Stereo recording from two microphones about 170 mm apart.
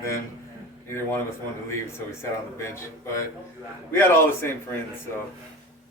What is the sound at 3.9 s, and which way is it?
Speech, 15° left (ahead or behind).